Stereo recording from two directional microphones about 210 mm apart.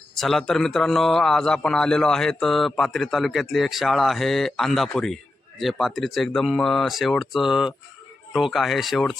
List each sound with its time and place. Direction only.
0.2 s a man's voice: centre (ahead or behind)